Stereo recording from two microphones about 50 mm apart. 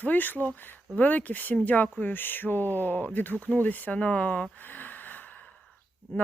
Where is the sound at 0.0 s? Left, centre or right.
Left.